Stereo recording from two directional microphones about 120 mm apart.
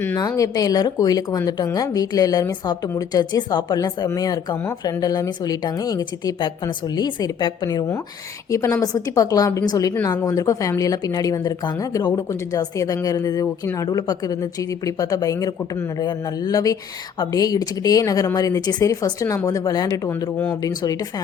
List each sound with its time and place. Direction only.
0.2 s speech: 30° left (ahead or behind)
8.4 s speech: 25° left (ahead or behind)